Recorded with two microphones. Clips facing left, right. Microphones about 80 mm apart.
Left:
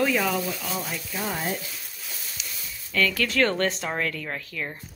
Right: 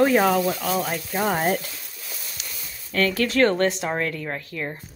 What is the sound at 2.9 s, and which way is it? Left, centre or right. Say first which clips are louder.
Speech: right 3 dB; right.